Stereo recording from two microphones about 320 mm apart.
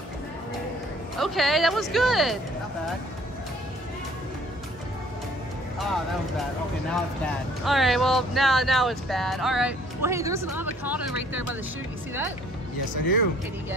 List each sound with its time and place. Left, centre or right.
1.1 s speech: centre
6.9 s speech: centre
12.9 s speech: left